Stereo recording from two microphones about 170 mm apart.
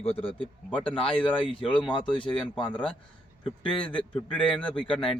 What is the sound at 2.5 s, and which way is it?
Speech, 30° left (ahead or behind).